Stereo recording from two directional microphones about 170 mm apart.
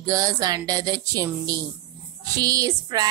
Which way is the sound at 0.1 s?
20° right (ahead or behind).